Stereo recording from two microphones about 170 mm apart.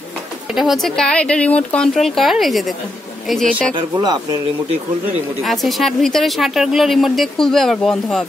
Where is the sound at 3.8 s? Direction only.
25° right (ahead or behind).